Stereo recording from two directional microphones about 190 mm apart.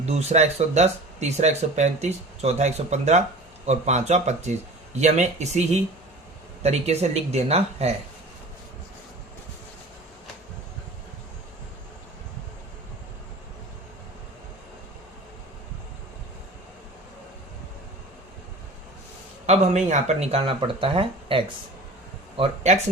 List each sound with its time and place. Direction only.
0.0 s speech: 35° right (ahead or behind)
19.5 s speech: 35° right (ahead or behind)